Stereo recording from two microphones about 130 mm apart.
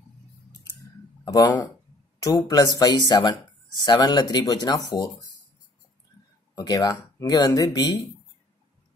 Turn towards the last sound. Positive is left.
turn(degrees=30)  # may be behind; listen again after turning